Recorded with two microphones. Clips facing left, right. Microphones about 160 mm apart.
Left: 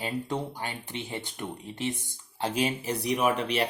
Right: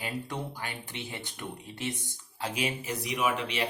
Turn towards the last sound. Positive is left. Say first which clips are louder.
# left 4 dB
turn(degrees=40)  # may be behind; listen again after turning